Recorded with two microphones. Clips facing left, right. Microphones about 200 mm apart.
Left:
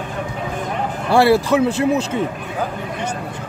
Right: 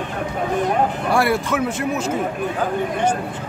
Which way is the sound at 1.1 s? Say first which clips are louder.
Left 9 dB; 30° left (ahead or behind).